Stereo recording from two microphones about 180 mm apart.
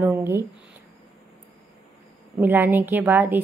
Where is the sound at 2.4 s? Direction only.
10° right (ahead or behind).